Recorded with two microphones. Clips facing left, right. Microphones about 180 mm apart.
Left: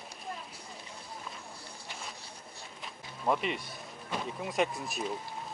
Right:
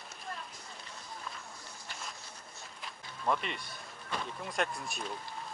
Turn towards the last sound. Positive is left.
turn(degrees=0)  # may be behind; listen again after turning